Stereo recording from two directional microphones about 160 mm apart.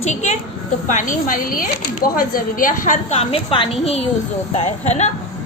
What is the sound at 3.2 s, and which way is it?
A woman's voice, 35° left (ahead or behind).